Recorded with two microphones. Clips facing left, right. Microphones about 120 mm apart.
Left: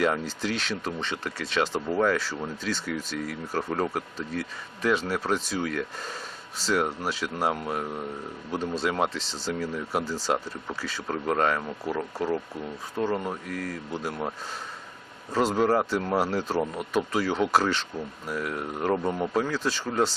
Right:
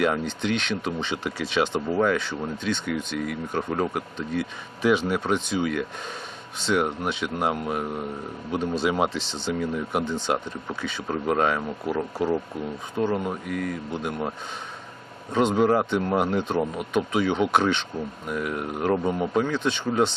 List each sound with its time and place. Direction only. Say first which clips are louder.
0.0 s speech: right 2 dB; centre (ahead or behind)